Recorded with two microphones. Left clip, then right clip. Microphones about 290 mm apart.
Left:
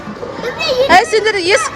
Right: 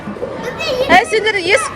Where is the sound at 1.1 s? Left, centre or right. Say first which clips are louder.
Left 1 dB; centre.